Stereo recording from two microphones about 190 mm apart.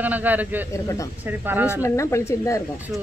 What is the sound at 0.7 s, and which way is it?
Speech, 15° left (ahead or behind).